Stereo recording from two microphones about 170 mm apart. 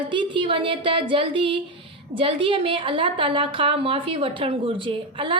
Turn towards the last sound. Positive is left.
turn(degrees=-30)  # may be behind; listen again after turning